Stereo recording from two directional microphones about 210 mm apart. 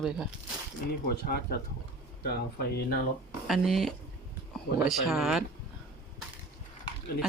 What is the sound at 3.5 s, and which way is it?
Speech, centre (ahead or behind).